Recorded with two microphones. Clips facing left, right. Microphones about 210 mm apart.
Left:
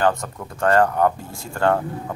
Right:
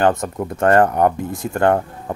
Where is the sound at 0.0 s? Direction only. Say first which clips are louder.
Right 4 dB; 20° right (ahead or behind).